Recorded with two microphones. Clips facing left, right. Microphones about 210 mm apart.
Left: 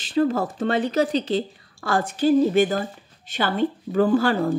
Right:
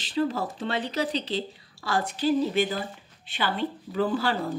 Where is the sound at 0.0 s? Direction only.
50° left (ahead or behind).